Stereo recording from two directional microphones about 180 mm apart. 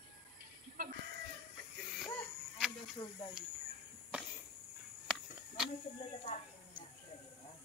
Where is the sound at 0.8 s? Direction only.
55° right (ahead or behind).